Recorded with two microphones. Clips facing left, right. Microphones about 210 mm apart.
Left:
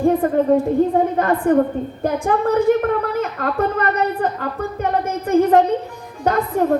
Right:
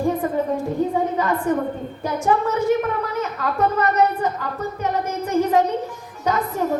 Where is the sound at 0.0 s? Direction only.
55° left (ahead or behind).